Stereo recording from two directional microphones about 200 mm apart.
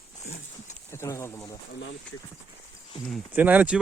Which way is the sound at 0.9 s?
15° left (ahead or behind).